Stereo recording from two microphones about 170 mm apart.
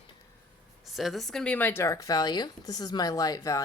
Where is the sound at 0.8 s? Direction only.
Centre (ahead or behind).